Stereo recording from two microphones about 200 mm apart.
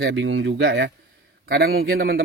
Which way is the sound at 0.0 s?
70° right (ahead or behind).